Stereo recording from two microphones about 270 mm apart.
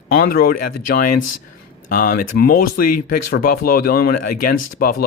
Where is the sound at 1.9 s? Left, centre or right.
Left.